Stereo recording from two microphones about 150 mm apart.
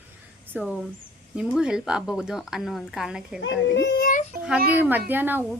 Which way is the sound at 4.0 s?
70° left (ahead or behind).